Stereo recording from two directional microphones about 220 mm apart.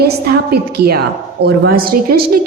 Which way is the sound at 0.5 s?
45° right (ahead or behind).